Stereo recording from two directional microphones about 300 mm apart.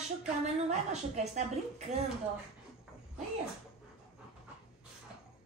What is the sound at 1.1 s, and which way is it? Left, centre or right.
Speech, right.